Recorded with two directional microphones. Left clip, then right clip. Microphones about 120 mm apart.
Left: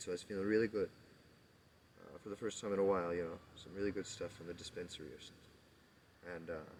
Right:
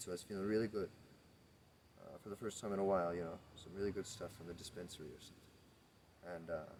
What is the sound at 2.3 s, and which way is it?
Speech, 50° right (ahead or behind).